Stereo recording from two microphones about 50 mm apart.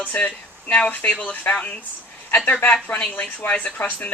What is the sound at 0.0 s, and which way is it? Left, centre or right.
Speech, left.